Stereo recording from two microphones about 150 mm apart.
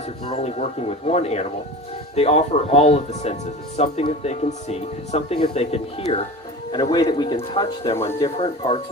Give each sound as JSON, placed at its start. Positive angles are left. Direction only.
{"t": 0.3, "sound": "speech", "side_deg": 45}
{"t": 6.7, "sound": "speech", "side_deg": 30}